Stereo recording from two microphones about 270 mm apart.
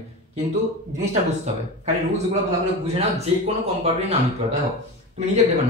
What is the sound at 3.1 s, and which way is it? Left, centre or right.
Speech, right.